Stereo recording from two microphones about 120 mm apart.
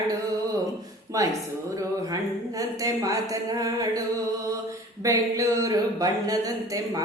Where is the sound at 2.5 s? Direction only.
30° right (ahead or behind).